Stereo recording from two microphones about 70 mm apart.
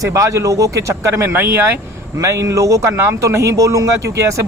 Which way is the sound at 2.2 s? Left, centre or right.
Right.